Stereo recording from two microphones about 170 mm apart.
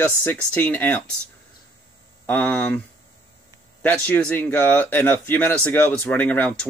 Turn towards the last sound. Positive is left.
turn(degrees=10)  # may be behind; listen again after turning